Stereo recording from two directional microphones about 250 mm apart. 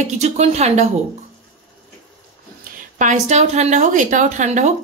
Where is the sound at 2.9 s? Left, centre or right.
Right.